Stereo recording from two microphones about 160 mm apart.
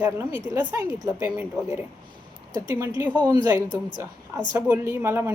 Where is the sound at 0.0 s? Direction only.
15° right (ahead or behind).